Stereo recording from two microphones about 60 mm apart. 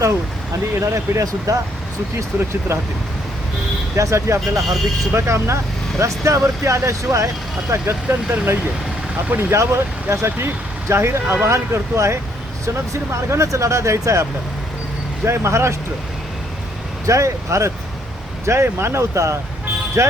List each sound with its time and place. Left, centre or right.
0.7 s speech: right
2.1 s speech: right
3.9 s speech: right
7.7 s speech: right
17.1 s speech: right